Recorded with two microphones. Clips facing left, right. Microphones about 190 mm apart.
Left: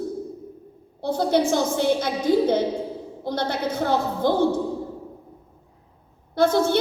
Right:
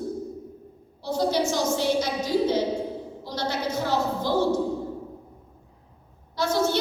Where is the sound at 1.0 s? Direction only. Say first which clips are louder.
Left 3 dB; 55° left (ahead or behind).